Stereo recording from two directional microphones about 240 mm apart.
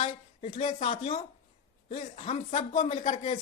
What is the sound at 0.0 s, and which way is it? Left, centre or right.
Speech, left.